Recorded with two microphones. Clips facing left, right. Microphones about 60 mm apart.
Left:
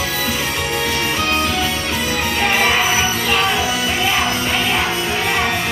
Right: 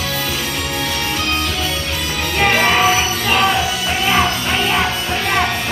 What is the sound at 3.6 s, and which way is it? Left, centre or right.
Music, left.